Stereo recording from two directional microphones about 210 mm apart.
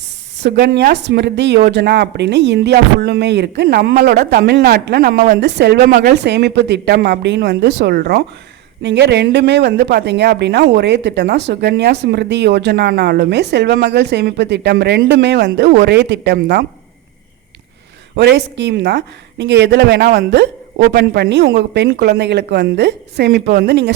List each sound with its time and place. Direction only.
0.6 s a woman's voice: 50° right (ahead or behind)
18.2 s speech: 55° right (ahead or behind)